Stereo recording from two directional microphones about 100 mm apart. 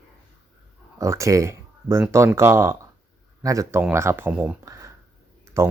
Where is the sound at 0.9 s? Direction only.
30° right (ahead or behind).